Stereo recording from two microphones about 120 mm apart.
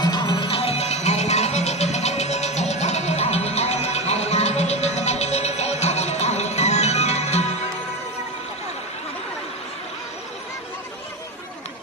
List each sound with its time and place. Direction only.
0.0 s music: 35° left (ahead or behind); by 7.5 s 65° left (ahead or behind)